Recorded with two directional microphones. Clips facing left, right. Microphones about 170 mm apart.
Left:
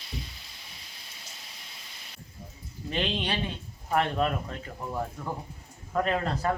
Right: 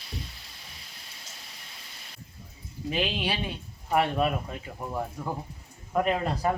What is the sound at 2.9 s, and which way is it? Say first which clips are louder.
Speech: right 1 dB; 5° right (ahead or behind).